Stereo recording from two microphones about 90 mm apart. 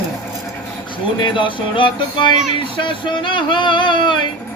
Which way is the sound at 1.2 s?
65° left (ahead or behind).